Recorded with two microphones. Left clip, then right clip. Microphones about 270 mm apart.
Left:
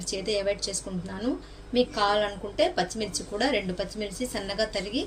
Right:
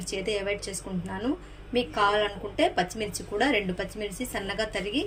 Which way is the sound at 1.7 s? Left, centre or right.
Right.